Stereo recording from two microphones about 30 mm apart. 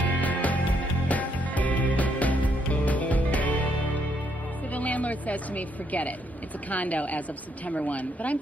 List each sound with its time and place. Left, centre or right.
0.2 s music: left
4.7 s music: left
6.7 s a woman's voice: left